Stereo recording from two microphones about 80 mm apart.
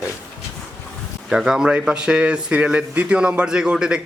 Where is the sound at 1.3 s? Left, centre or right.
Centre.